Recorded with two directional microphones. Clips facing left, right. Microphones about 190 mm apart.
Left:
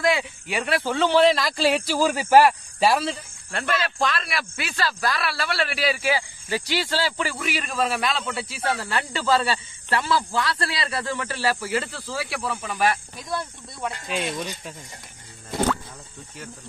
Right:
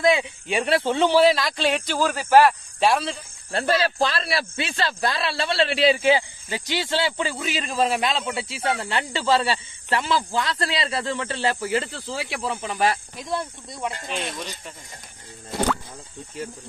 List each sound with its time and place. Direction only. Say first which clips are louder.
0.0 s speech: right 3 dB; 20° right (ahead or behind)
1.0 s speech: even; 5° right (ahead or behind)
3.5 s speech: right 4 dB; 30° right (ahead or behind)
14.0 s speech: left 2 dB; 5° left (ahead or behind)